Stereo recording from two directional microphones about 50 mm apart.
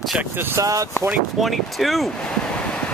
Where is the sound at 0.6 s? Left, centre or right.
Right.